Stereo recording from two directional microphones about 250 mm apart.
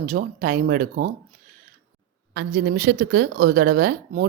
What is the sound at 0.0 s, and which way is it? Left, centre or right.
Speech, right.